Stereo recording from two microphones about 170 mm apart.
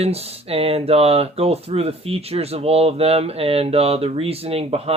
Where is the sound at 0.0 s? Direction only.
35° right (ahead or behind).